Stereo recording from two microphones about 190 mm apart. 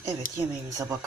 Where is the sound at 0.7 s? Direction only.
15° right (ahead or behind).